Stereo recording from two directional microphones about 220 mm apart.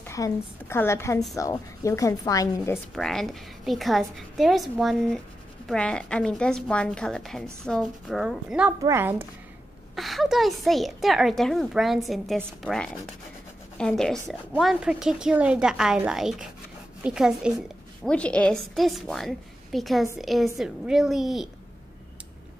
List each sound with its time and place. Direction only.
0.0 s a woman's voice: 10° left (ahead or behind)
2.9 s a woman's voice: centre (ahead or behind)